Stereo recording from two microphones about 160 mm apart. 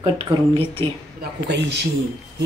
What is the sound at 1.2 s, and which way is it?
Speech, 90° right.